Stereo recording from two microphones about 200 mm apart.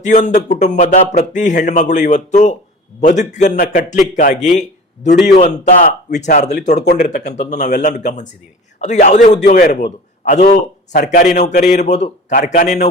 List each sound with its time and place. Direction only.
0.0 s speech: 40° left (ahead or behind)